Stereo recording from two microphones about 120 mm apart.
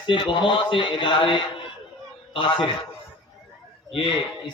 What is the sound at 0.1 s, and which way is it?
A man's voice, 45° left (ahead or behind).